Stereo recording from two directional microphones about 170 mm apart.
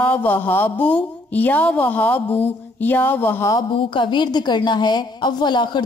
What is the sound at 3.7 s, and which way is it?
A woman's voice, 30° left (ahead or behind).